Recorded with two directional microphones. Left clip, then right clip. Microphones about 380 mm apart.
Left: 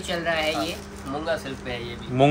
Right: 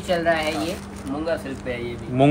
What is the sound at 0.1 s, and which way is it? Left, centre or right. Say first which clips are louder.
Speech: right 4 dB; centre.